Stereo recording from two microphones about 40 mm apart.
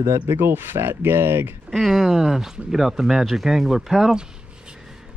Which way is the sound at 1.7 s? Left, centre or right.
Centre.